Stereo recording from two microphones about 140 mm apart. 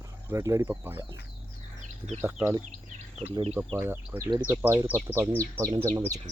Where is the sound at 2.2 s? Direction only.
10° right (ahead or behind).